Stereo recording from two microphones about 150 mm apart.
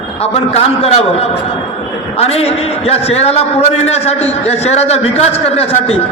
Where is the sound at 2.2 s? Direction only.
45° left (ahead or behind).